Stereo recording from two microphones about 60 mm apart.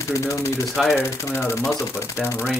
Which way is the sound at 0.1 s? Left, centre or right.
Left.